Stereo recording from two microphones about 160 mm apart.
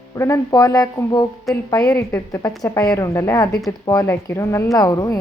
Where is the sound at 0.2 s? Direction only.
20° left (ahead or behind).